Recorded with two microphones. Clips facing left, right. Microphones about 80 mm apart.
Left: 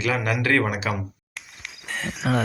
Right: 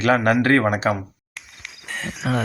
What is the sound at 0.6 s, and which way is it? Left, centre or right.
Speech, right.